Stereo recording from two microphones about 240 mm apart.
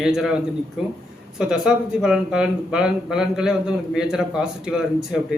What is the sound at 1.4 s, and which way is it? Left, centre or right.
Speech, centre.